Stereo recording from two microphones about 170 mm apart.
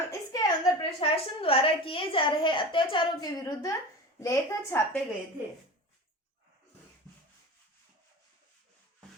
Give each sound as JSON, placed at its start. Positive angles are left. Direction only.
{"t": 0.1, "sound": "a woman's voice", "side_deg": 25}